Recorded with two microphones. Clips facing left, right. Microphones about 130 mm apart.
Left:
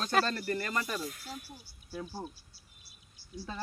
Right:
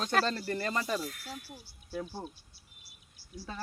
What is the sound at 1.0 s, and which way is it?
Speech, 15° left (ahead or behind).